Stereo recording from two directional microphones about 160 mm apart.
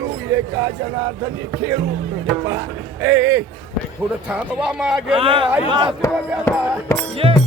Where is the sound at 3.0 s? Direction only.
15° right (ahead or behind).